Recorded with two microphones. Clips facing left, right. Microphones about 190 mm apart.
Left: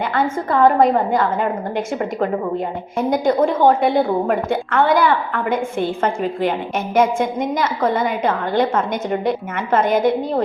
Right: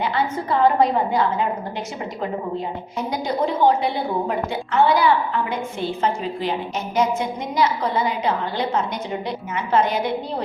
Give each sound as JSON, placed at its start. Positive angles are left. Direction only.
{"t": 0.0, "sound": "a woman's voice", "side_deg": 50}
{"t": 3.0, "sound": "a woman's voice", "side_deg": 50}